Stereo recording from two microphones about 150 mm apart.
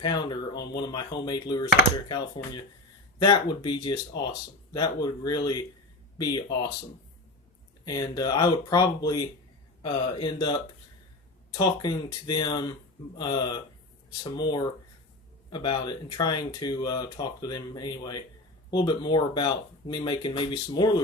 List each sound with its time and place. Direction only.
0.0 s speech: 30° left (ahead or behind)
7.9 s speech: 25° left (ahead or behind)